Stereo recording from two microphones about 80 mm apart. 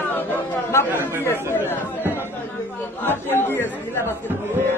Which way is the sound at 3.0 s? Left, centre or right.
Left.